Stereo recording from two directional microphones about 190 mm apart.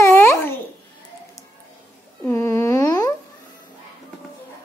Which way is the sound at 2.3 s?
15° left (ahead or behind).